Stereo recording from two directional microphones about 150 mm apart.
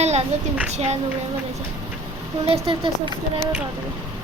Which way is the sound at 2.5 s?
40° right (ahead or behind).